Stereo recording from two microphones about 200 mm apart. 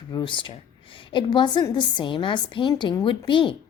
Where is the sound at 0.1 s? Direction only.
20° left (ahead or behind).